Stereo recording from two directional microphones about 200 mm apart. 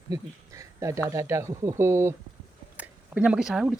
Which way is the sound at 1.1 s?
15° right (ahead or behind).